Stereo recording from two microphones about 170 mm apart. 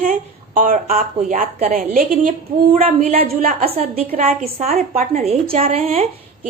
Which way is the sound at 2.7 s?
35° right (ahead or behind).